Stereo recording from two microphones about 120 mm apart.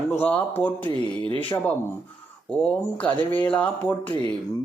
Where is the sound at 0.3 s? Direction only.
15° left (ahead or behind).